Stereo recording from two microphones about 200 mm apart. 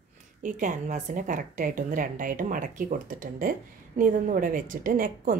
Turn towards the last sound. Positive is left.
turn(degrees=-45)  # may be behind; listen again after turning